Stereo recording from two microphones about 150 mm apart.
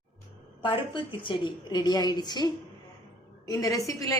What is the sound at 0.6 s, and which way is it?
A woman's voice, 35° left (ahead or behind).